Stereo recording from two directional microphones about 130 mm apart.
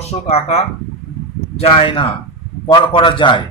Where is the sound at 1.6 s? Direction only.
45° left (ahead or behind).